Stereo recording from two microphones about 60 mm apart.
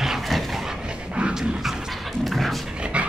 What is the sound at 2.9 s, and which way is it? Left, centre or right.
Dog, centre.